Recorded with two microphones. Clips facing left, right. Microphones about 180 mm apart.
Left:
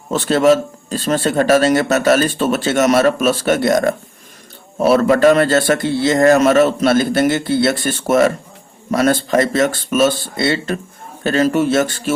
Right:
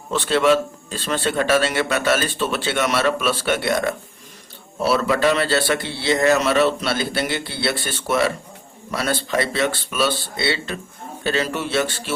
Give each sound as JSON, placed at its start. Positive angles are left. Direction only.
{"t": 0.1, "sound": "a man's voice", "side_deg": 40}